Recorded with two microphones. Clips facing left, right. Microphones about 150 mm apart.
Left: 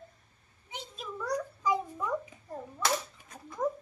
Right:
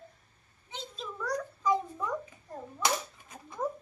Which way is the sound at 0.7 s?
10° left (ahead or behind).